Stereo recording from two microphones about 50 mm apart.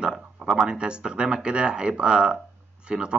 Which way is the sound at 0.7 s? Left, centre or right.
Centre.